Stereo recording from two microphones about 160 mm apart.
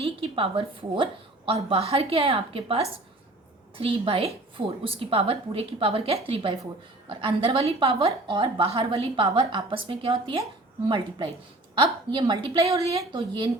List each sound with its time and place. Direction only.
0.0 s a woman's voice: 35° right (ahead or behind); by 13.2 s 20° right (ahead or behind)